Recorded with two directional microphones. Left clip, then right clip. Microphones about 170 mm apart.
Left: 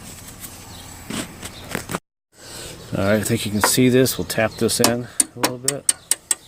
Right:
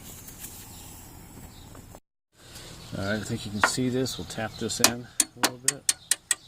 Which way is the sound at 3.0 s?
35° left (ahead or behind).